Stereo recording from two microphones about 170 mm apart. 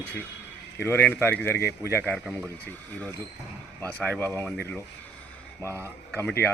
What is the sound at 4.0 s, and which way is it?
Speech, 10° left (ahead or behind).